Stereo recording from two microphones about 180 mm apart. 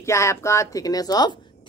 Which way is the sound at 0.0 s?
15° left (ahead or behind).